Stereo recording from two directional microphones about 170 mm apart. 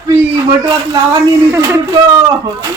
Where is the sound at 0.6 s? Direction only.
25° right (ahead or behind).